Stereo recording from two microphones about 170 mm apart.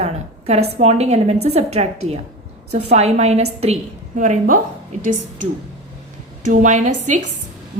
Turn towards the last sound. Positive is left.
turn(degrees=-45)  # may be behind; listen again after turning